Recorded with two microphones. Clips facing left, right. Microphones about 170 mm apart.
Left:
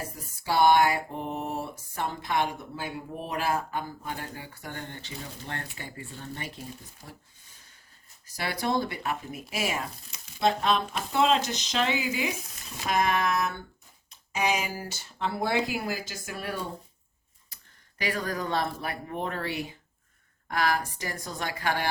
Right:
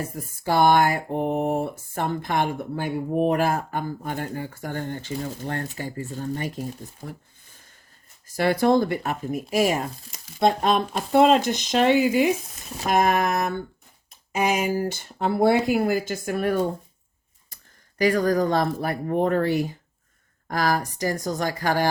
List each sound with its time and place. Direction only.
0.4 s speech: 50° right (ahead or behind)
8.4 s speech: 50° right (ahead or behind)